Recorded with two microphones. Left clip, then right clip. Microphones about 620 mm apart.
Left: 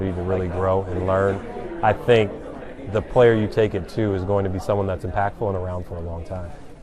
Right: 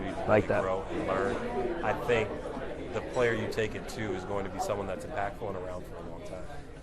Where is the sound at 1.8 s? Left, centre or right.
Left.